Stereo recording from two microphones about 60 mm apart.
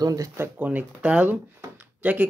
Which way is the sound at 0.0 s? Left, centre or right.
Right.